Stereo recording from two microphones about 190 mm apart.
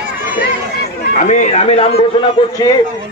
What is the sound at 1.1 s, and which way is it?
Speech, 40° left (ahead or behind).